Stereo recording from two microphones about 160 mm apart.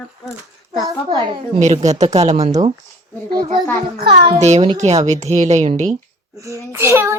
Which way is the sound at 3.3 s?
25° right (ahead or behind).